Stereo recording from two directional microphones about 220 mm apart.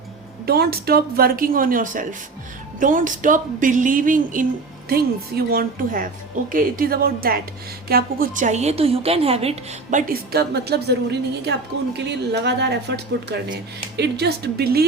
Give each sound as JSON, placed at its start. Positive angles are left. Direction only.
{"t": 0.4, "sound": "a woman's voice", "side_deg": -45}
{"t": 10.1, "sound": "speech", "side_deg": -45}